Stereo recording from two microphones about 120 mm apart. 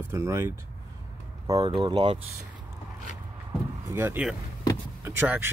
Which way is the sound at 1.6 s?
45° right (ahead or behind).